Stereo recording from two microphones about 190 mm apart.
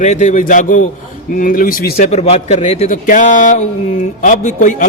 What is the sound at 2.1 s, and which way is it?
A man's voice, 35° left (ahead or behind).